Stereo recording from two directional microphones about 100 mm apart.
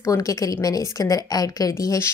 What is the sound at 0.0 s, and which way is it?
A woman's voice, 35° left (ahead or behind).